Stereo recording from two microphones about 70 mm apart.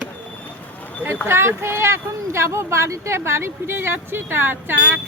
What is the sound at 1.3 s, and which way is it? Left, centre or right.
Speech, right.